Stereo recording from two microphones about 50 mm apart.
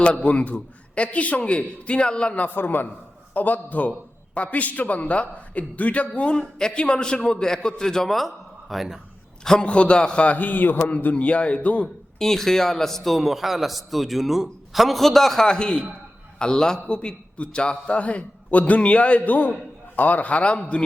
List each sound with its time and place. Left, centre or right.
0.0 s a man's voice: left
2.6 s a man's voice: left; by 9.0 s centre
9.4 s a man's voice: centre; by 10.9 s left
11.1 s a man's voice: left
12.2 s a man's voice: centre